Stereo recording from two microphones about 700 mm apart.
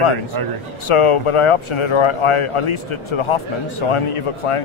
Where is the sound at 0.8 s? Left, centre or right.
Left.